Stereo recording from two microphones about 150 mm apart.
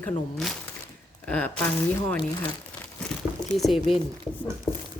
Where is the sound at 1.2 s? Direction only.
10° left (ahead or behind).